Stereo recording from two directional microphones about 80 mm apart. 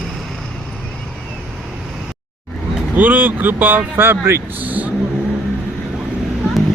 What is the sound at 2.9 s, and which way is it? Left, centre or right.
Speech, right.